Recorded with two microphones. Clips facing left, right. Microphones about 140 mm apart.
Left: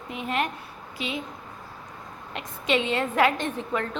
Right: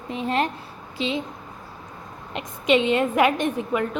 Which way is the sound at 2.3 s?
20° right (ahead or behind).